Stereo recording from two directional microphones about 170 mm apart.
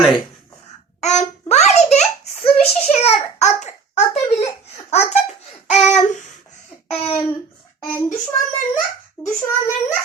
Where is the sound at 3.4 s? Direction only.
45° left (ahead or behind).